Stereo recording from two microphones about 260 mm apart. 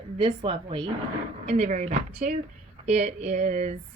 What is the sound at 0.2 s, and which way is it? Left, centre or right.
A woman's voice, centre.